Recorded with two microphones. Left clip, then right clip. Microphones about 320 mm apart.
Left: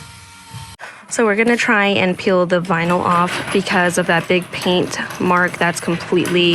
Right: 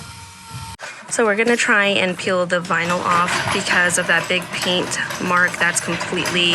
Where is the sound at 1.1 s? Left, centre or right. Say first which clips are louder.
Left 1 dB; centre.